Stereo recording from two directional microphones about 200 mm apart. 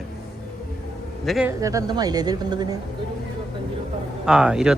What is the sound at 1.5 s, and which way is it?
A woman's voice, 15° right (ahead or behind).